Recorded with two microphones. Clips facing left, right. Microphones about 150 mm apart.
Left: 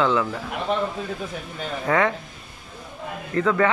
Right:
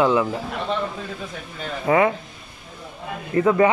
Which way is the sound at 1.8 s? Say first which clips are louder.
Right 3 dB; 10° right (ahead or behind).